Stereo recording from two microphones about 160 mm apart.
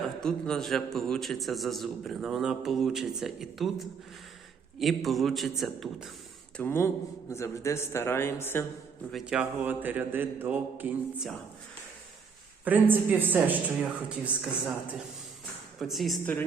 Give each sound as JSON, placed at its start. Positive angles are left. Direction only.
{"t": 0.2, "sound": "a man's voice", "side_deg": 5}
{"t": 6.6, "sound": "a man's voice", "side_deg": 15}
{"t": 9.1, "sound": "a woman's voice", "side_deg": -5}
{"t": 12.6, "sound": "a woman's voice", "side_deg": -10}